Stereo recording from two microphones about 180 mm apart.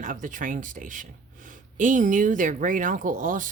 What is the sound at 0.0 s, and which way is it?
Speech, 50° right (ahead or behind).